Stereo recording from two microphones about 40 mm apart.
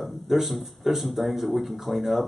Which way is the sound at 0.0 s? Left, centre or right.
Centre.